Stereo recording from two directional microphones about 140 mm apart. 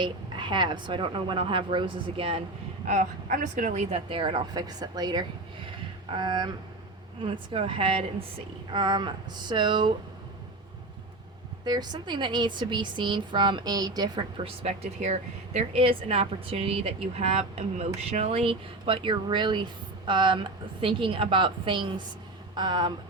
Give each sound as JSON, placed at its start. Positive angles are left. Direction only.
{"t": 0.0, "sound": "speech", "side_deg": -35}
{"t": 2.8, "sound": "a woman's voice", "side_deg": -70}
{"t": 3.8, "sound": "speech", "side_deg": -40}
{"t": 11.6, "sound": "speech", "side_deg": -30}